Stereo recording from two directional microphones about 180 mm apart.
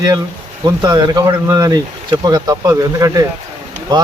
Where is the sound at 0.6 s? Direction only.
25° right (ahead or behind).